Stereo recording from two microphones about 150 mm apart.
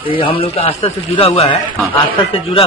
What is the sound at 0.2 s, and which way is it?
A man's voice, 35° left (ahead or behind).